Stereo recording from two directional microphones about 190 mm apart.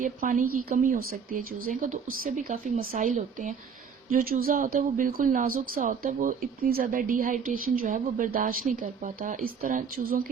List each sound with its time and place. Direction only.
0.0 s speech: 45° right (ahead or behind)